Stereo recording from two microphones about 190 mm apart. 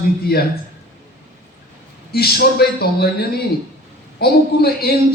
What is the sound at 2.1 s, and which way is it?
Speech, 55° left (ahead or behind).